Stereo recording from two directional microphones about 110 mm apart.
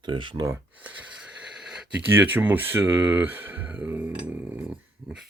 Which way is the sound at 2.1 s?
15° right (ahead or behind).